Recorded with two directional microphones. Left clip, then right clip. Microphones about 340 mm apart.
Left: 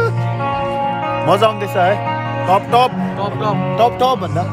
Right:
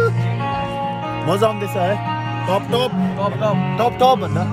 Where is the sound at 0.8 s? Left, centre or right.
Left.